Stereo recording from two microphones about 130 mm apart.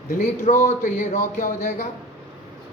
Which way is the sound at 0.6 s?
70° left (ahead or behind).